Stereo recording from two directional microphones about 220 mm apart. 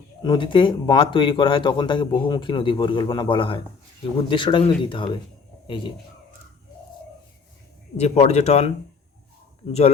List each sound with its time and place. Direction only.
0.2 s a man's voice: 20° left (ahead or behind)
7.9 s speech: 30° left (ahead or behind)